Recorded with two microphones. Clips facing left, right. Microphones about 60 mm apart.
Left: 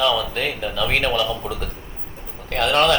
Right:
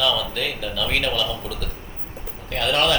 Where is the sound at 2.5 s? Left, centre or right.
Left.